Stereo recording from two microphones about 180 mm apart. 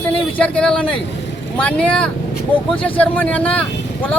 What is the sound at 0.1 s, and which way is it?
Speech, 5° left (ahead or behind).